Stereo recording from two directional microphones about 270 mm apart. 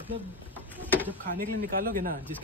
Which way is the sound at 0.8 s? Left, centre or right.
Centre.